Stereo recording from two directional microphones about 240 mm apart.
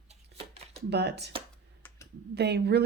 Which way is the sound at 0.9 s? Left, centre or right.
Right.